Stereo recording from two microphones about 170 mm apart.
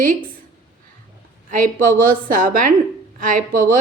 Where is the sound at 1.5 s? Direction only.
55° right (ahead or behind).